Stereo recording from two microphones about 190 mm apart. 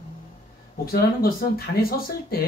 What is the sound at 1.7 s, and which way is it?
Speech, 50° left (ahead or behind).